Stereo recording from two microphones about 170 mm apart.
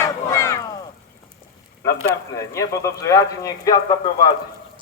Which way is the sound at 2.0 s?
20° left (ahead or behind).